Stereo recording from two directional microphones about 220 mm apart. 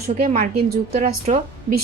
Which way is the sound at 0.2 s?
40° right (ahead or behind).